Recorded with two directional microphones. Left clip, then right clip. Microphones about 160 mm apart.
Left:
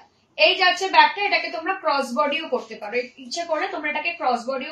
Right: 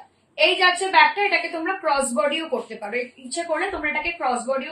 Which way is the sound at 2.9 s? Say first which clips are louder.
Left 3 dB; 25° right (ahead or behind).